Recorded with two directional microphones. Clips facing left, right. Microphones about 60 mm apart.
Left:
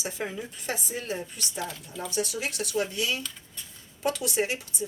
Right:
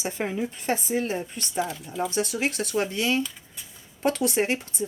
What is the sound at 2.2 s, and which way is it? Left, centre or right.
Speech, right.